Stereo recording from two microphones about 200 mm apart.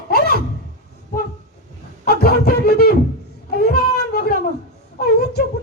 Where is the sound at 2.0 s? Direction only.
50° left (ahead or behind).